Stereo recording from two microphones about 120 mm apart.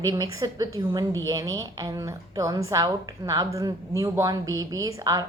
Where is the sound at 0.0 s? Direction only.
30° right (ahead or behind).